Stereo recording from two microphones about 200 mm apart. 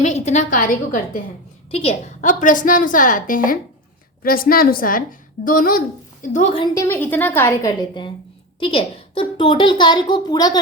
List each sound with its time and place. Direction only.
0.0 s a woman's voice: 35° left (ahead or behind)
1.7 s a woman's voice: 30° left (ahead or behind)
6.7 s a woman's voice: 10° left (ahead or behind)